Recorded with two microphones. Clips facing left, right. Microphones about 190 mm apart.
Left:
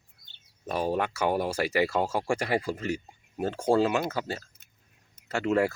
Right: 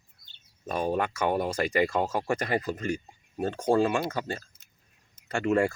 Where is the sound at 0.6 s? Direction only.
5° left (ahead or behind).